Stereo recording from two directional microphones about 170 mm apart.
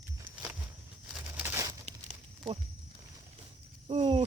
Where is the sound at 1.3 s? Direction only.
15° right (ahead or behind).